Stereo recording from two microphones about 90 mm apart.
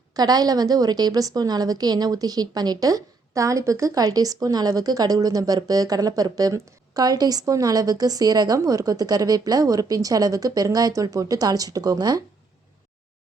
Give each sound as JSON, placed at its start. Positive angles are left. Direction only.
{"t": 0.1, "sound": "a woman's voice", "side_deg": -50}